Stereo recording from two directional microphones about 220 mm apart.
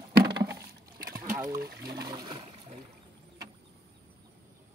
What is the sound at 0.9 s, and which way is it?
Splash, 40° right (ahead or behind).